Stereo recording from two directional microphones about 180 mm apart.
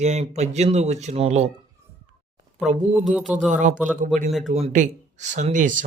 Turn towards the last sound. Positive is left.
turn(degrees=-45)  # may be behind; listen again after turning